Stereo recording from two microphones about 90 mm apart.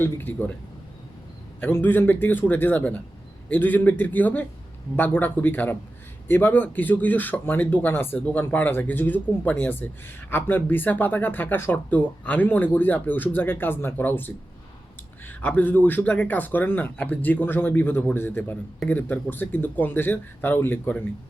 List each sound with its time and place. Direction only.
0.0 s speech: 20° left (ahead or behind)
1.6 s speech: 20° left (ahead or behind)